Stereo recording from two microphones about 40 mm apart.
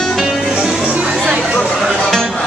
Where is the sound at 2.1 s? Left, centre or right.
Centre.